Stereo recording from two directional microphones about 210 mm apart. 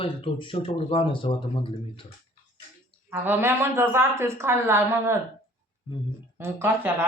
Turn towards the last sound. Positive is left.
turn(degrees=-10)  # may be behind; listen again after turning